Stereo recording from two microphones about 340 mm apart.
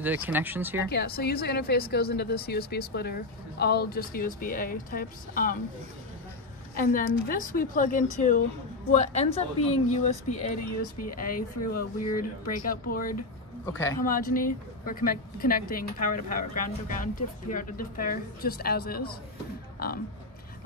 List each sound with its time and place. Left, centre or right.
0.0 s speech: centre
0.8 s a woman's voice: left
6.7 s a woman's voice: left
10.3 s speech: left
12.6 s a woman's voice: left
13.7 s speech: centre
14.0 s a woman's voice: left